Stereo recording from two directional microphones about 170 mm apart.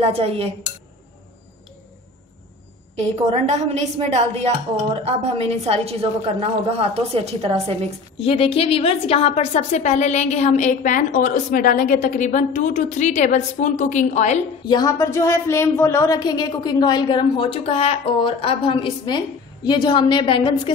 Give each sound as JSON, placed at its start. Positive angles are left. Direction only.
{"t": 0.0, "sound": "a woman's voice", "side_deg": -35}
{"t": 3.2, "sound": "a woman's voice", "side_deg": -40}
{"t": 8.3, "sound": "a woman's voice", "side_deg": 35}
{"t": 14.7, "sound": "a woman's voice", "side_deg": 20}